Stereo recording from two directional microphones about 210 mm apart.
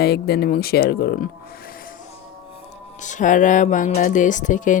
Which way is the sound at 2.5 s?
35° left (ahead or behind).